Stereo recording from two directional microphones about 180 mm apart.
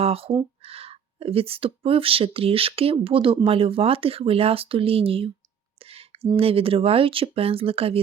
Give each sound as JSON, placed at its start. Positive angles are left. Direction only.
{"t": 0.0, "sound": "speech", "side_deg": -30}
{"t": 5.8, "sound": "a sound", "side_deg": -35}
{"t": 6.3, "sound": "speech", "side_deg": -30}